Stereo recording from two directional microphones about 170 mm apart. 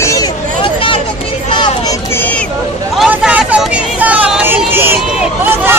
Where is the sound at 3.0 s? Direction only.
5° right (ahead or behind).